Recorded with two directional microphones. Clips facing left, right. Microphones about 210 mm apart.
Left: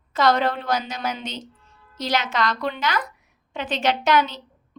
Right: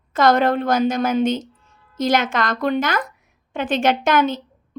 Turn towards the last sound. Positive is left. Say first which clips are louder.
# right 14 dB
turn(degrees=-50)  # may be behind; listen again after turning